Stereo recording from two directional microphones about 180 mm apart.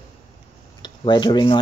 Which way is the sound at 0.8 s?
25° left (ahead or behind).